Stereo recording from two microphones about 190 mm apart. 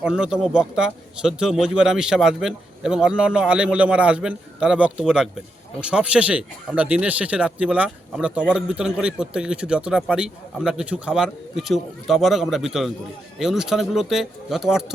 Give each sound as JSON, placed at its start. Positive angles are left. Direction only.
{"t": 0.0, "sound": "speech", "side_deg": -5}